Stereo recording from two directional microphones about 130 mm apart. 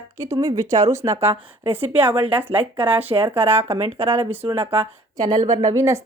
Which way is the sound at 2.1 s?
45° right (ahead or behind).